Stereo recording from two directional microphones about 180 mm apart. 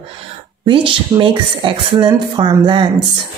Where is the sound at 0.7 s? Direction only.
30° right (ahead or behind).